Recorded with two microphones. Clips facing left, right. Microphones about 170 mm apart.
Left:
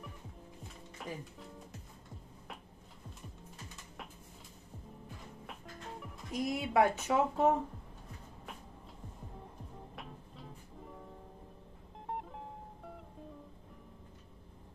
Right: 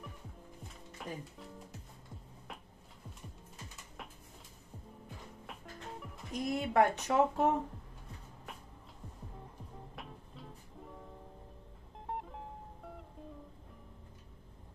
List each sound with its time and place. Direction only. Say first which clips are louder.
0.9 s speech: even; centre (ahead or behind)
5.5 s music: even; centre (ahead or behind)
9.9 s music: even; centre (ahead or behind)
12.1 s music: even; centre (ahead or behind)